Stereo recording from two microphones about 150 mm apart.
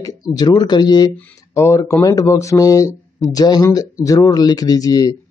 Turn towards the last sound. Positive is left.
turn(degrees=25)  # may be behind; listen again after turning